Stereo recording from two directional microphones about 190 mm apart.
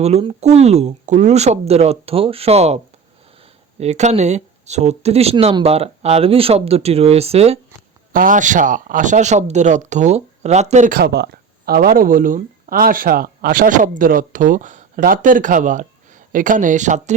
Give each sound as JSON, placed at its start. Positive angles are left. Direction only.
{"t": 0.0, "sound": "speech", "side_deg": -30}
{"t": 8.1, "sound": "speech", "side_deg": -45}